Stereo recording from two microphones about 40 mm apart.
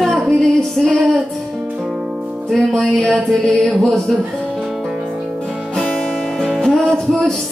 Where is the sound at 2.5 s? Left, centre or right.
Centre.